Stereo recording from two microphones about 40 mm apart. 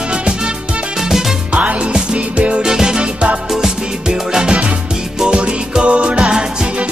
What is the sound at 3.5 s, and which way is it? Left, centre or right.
Music, centre.